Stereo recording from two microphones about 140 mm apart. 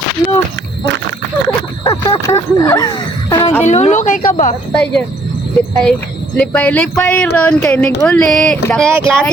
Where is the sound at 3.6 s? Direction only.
55° left (ahead or behind).